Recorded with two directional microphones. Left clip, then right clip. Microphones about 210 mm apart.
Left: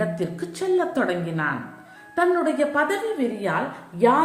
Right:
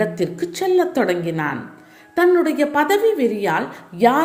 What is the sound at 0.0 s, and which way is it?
A woman's voice, 35° right (ahead or behind).